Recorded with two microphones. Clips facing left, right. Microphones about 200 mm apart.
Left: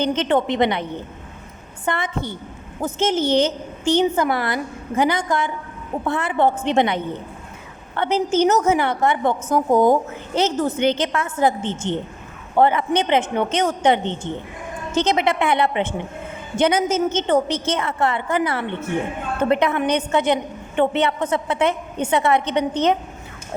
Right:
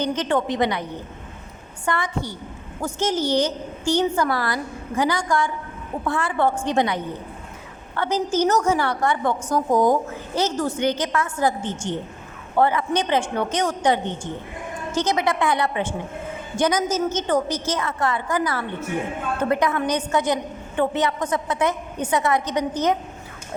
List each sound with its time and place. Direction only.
0.0 s a woman's voice: 20° left (ahead or behind)